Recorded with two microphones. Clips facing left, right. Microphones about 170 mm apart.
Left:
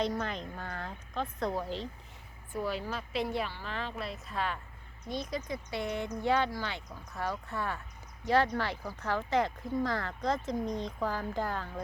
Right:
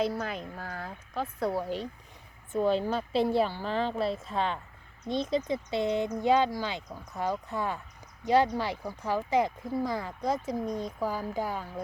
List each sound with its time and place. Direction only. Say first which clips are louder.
0.0 s speech: right 2 dB; 5° right (ahead or behind)
2.5 s a woman's voice: right 8 dB; 25° right (ahead or behind)